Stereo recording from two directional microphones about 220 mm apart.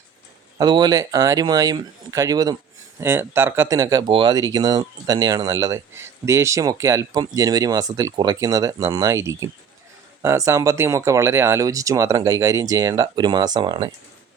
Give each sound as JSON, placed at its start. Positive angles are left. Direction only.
{"t": 0.6, "sound": "speech", "side_deg": -20}